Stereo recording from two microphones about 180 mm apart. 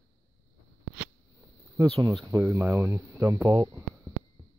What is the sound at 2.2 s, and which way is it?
Speech, 15° right (ahead or behind).